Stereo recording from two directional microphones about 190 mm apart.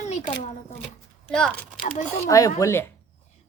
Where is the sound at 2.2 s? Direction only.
15° left (ahead or behind).